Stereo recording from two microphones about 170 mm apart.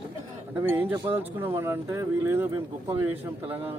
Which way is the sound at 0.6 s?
10° right (ahead or behind).